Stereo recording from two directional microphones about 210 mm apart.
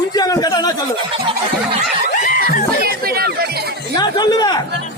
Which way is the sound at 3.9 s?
20° left (ahead or behind).